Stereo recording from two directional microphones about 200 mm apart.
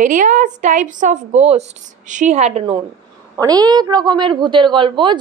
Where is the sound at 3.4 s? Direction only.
20° right (ahead or behind).